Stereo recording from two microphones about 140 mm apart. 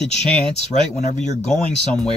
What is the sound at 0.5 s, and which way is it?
Speech, 55° left (ahead or behind).